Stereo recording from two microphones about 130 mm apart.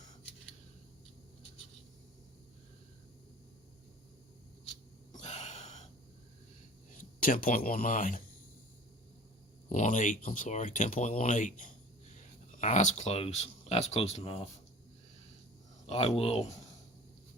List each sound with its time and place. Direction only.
5.1 s gasp: 60° left (ahead or behind)
7.2 s speech: 90° left
9.6 s speech: 70° left (ahead or behind); by 14.4 s 55° left (ahead or behind)
15.9 s speech: 50° left (ahead or behind)